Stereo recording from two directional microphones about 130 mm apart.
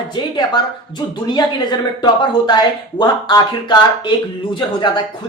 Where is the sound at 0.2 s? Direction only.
35° left (ahead or behind).